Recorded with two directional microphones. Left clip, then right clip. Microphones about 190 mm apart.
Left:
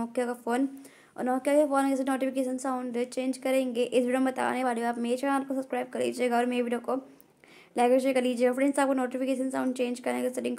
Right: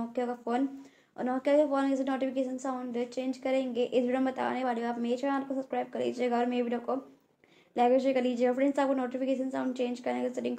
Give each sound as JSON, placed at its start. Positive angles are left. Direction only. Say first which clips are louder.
{"t": 0.1, "sound": "a woman's voice", "louder": "left 2 dB", "side_deg": 20}